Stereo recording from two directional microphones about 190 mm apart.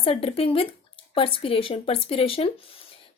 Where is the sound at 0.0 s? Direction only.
30° left (ahead or behind).